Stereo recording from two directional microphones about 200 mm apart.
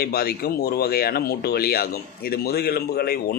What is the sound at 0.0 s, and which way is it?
Speech, 50° left (ahead or behind).